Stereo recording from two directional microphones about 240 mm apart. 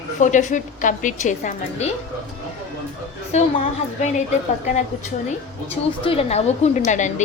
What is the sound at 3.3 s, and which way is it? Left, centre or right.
Speech, left.